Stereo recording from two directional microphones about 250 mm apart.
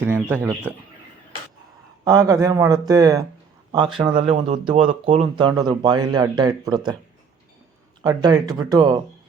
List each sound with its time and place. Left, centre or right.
0.0 s speech: centre
2.0 s speech: centre
4.1 s speech: right
8.0 s speech: centre